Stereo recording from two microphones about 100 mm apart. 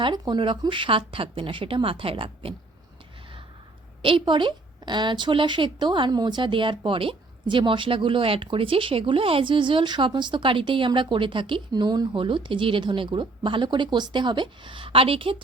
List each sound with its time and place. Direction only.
0.0 s a woman's voice: 50° right (ahead or behind)
4.0 s a woman's voice: 55° right (ahead or behind)